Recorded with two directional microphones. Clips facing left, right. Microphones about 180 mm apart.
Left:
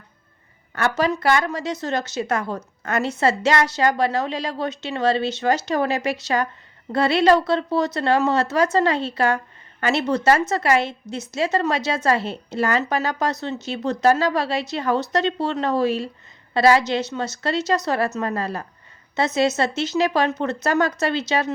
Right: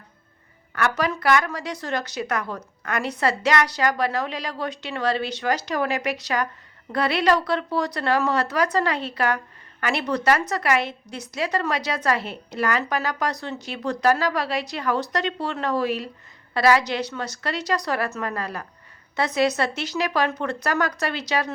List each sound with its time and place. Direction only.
0.8 s a woman's voice: 25° left (ahead or behind)